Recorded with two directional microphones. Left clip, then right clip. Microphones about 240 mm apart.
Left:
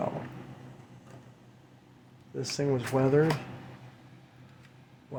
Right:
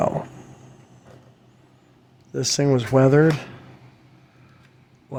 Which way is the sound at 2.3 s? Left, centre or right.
Right.